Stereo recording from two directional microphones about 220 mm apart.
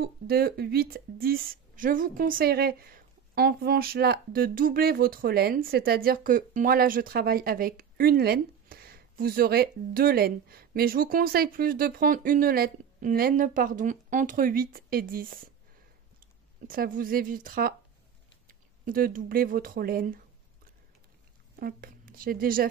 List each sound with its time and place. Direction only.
0.0 s speech: 45° right (ahead or behind)
16.6 s speech: 40° right (ahead or behind)
21.5 s speech: 40° right (ahead or behind)